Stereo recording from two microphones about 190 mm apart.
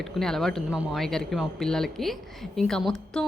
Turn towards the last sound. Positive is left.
turn(degrees=0)  # may be behind; listen again after turning